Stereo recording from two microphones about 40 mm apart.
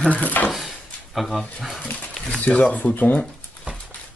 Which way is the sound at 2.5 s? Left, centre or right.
Left.